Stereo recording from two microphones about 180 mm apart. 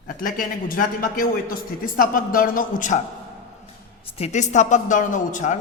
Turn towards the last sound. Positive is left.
turn(degrees=45)  # may be behind; listen again after turning